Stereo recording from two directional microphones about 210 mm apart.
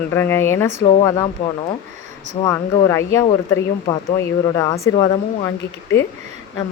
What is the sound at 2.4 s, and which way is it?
Speech, 15° left (ahead or behind).